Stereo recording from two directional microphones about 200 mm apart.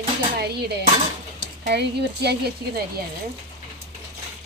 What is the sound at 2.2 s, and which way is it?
Speech, 50° right (ahead or behind).